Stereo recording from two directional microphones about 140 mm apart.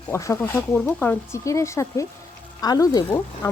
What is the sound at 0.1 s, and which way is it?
Speech, 20° left (ahead or behind).